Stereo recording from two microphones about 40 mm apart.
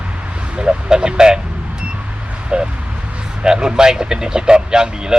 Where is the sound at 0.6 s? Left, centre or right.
Right.